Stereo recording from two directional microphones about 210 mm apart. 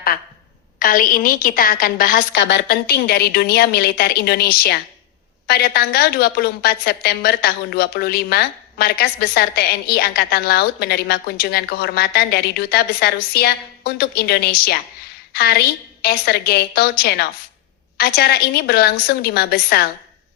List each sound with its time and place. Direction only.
0.8 s a woman's voice: 40° left (ahead or behind)